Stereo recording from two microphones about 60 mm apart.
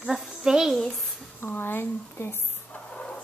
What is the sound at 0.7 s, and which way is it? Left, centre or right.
Speech, centre.